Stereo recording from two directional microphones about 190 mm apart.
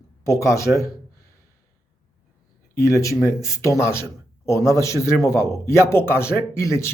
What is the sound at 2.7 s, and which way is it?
Speech, 15° left (ahead or behind).